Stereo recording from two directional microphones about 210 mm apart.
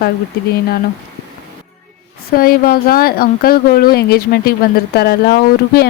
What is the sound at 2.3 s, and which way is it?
A woman's voice, 45° left (ahead or behind).